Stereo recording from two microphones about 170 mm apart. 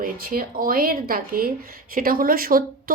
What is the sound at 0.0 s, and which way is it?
Speech, 55° right (ahead or behind).